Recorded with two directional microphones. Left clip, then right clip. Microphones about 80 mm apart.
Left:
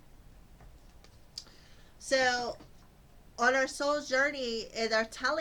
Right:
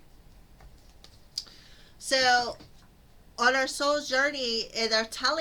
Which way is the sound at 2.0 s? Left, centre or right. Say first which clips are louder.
Right 5 dB; right.